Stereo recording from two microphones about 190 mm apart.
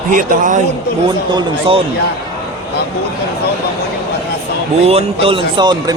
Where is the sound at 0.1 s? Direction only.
45° right (ahead or behind).